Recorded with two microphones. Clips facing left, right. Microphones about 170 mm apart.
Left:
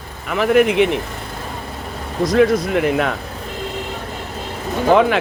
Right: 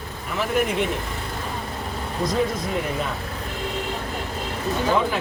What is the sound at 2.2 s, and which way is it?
Speech, 80° left.